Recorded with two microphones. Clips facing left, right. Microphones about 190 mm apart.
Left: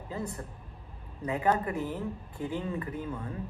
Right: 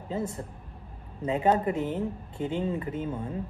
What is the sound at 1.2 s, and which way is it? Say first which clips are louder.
Speech: right 4 dB; 20° right (ahead or behind).